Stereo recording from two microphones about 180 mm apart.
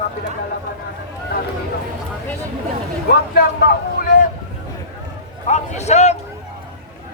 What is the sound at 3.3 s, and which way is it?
Speech, 60° left (ahead or behind).